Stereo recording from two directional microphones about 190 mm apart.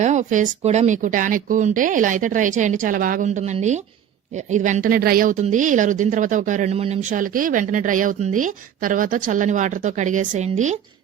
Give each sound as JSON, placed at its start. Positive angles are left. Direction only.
{"t": 0.0, "sound": "a woman's voice", "side_deg": -40}